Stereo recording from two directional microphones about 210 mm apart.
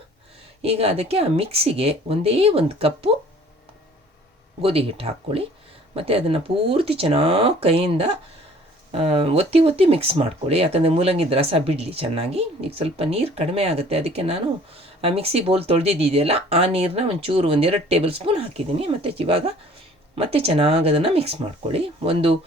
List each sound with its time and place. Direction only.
0.6 s speech: 30° right (ahead or behind)
4.6 s speech: 25° right (ahead or behind)